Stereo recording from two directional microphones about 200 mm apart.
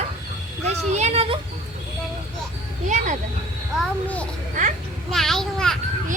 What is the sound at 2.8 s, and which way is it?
Speech, 40° right (ahead or behind).